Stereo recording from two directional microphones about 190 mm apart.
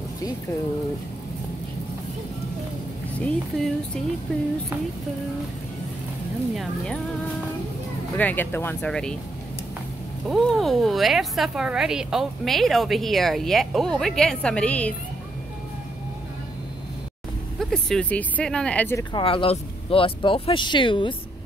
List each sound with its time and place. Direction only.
3.2 s speech: 5° left (ahead or behind)
6.5 s speech: centre (ahead or behind)
8.2 s speech: 10° left (ahead or behind)
10.2 s speech: centre (ahead or behind)
17.6 s speech: centre (ahead or behind)
19.1 s speech: 30° left (ahead or behind)